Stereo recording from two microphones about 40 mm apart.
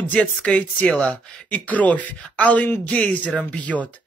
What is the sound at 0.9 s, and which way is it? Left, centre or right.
Speech, left.